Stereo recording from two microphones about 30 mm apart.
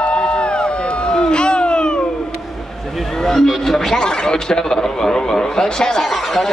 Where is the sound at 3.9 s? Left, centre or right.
Left.